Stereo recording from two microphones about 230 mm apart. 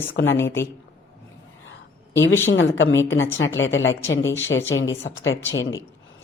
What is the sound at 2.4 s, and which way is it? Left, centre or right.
A woman's voice, left.